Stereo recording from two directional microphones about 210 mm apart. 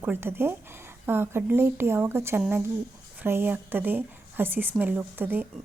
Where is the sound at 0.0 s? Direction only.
10° right (ahead or behind).